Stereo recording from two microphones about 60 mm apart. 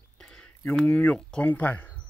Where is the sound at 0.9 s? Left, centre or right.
Left.